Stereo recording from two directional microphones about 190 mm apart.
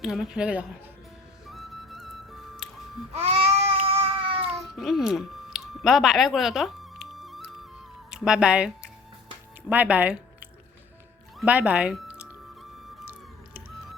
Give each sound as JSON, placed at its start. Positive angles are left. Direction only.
{"t": 0.0, "sound": "speech", "side_deg": -5}
{"t": 1.5, "sound": "music", "side_deg": 0}
{"t": 3.2, "sound": "babbling", "side_deg": -30}
{"t": 3.8, "sound": "cat", "side_deg": -30}
{"t": 4.4, "sound": "cat", "side_deg": 0}
{"t": 8.1, "sound": "speech", "side_deg": -5}
{"t": 11.3, "sound": "speech", "side_deg": -5}
{"t": 13.0, "sound": "music", "side_deg": -5}